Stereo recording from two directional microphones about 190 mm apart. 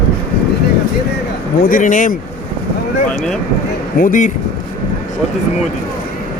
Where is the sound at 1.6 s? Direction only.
45° left (ahead or behind).